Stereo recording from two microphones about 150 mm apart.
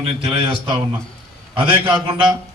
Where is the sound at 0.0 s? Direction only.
35° right (ahead or behind).